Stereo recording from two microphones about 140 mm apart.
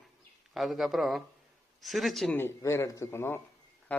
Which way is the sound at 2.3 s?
20° left (ahead or behind).